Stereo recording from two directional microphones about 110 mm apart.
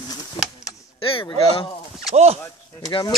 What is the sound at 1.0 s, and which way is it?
Speech, 55° left (ahead or behind).